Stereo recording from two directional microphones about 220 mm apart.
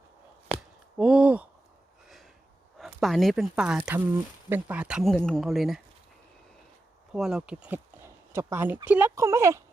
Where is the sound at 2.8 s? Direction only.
Centre (ahead or behind).